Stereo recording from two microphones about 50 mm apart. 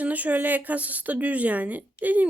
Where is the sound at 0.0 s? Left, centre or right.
Right.